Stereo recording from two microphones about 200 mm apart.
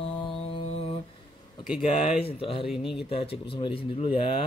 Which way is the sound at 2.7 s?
Centre (ahead or behind).